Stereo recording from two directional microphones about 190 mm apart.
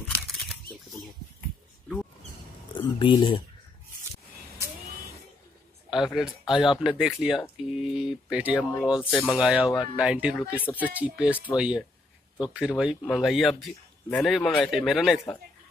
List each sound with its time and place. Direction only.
3.0 s speech: 25° left (ahead or behind)
5.9 s speech: centre (ahead or behind)
10.6 s speech: 10° left (ahead or behind)
10.9 s speech: 5° right (ahead or behind)